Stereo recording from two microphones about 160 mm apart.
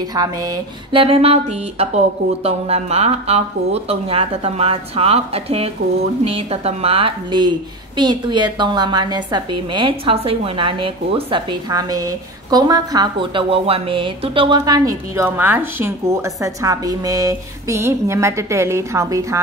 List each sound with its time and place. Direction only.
0.1 s speech: 25° right (ahead or behind)
1.0 s a woman's voice: 35° right (ahead or behind)
14.6 s speech: 20° right (ahead or behind)